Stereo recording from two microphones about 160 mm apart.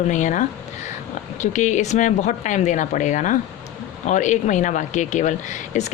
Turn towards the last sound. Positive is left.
turn(degrees=50)  # may be behind; listen again after turning